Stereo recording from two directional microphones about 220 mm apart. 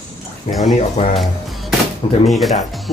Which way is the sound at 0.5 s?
Centre (ahead or behind).